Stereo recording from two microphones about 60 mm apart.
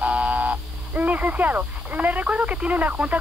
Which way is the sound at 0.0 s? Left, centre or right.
Right.